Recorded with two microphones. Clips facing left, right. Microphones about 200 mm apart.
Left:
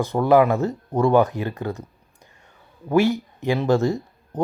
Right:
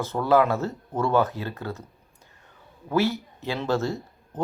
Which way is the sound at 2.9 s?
15° left (ahead or behind).